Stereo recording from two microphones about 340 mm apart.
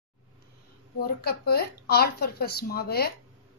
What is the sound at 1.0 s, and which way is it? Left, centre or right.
Speech, left.